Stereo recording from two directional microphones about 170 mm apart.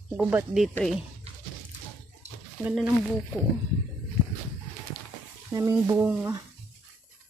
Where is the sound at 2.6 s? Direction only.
5° right (ahead or behind).